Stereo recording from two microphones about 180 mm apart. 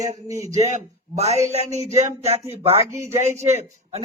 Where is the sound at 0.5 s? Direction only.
40° right (ahead or behind).